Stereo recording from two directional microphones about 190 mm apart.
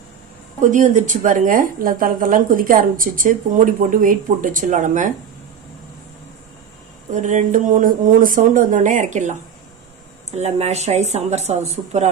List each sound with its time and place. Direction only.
0.6 s a woman's voice: 40° right (ahead or behind)
7.2 s a woman's voice: 40° right (ahead or behind)
10.3 s speech: 35° right (ahead or behind)